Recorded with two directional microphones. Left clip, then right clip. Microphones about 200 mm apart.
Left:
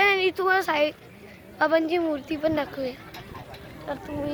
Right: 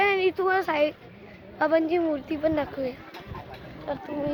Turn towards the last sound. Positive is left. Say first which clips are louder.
# right 1 dB
turn(degrees=5)  # may be behind; listen again after turning